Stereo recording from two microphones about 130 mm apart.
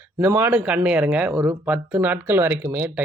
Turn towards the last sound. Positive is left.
turn(degrees=-15)  # may be behind; listen again after turning